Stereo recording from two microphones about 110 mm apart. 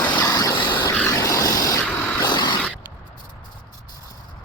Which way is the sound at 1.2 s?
30° left (ahead or behind).